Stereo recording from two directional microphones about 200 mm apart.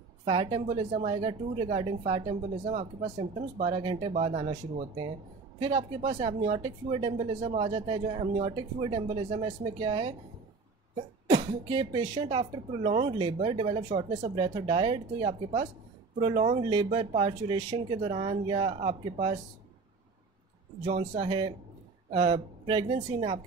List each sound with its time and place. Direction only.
0.2 s speech: 25° right (ahead or behind)
11.2 s speech: 25° right (ahead or behind)
20.8 s speech: 25° right (ahead or behind)